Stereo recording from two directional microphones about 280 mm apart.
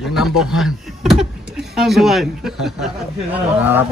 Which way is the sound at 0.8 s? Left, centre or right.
Centre.